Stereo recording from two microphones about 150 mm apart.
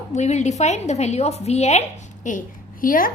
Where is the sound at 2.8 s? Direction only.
70° left (ahead or behind).